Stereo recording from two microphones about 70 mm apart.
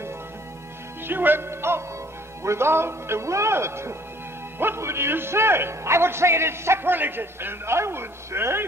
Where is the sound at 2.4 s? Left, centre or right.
Right.